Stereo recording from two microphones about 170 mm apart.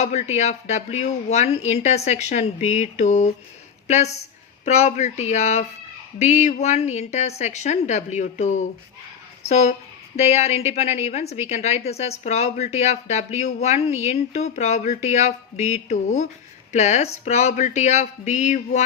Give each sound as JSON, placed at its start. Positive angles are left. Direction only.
{"t": 0.0, "sound": "a woman's voice", "side_deg": 40}